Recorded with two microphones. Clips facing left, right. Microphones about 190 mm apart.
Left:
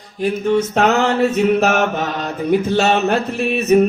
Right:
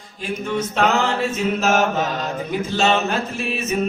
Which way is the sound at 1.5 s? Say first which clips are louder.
Left 3 dB; 60° left (ahead or behind).